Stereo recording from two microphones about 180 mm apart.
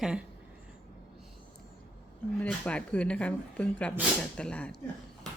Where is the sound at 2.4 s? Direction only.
5° left (ahead or behind).